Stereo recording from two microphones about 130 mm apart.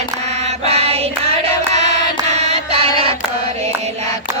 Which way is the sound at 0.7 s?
50° right (ahead or behind).